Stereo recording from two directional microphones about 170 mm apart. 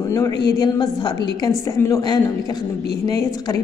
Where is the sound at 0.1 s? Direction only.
20° left (ahead or behind).